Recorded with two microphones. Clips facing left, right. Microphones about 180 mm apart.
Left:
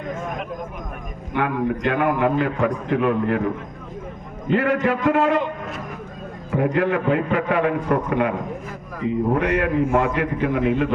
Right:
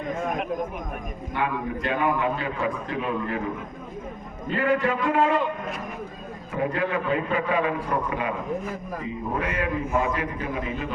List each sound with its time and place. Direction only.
1.4 s a man's voice: 70° left (ahead or behind)
4.4 s a man's voice: 75° left (ahead or behind)
6.5 s a man's voice: 65° left (ahead or behind)
9.3 s a man's voice: 75° left (ahead or behind)